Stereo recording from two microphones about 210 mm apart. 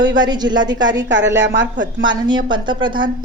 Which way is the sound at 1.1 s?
55° right (ahead or behind).